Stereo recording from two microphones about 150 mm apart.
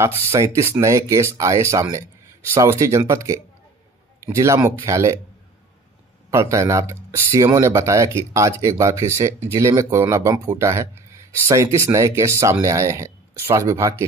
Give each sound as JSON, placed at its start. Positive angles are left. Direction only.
{"t": 0.0, "sound": "speech", "side_deg": -15}
{"t": 6.3, "sound": "speech", "side_deg": -20}